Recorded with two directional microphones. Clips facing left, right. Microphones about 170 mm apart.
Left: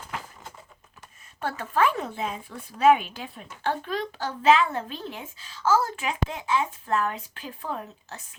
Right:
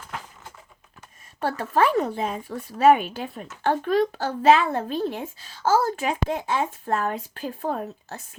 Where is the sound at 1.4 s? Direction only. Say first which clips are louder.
Right 3 dB; 40° right (ahead or behind).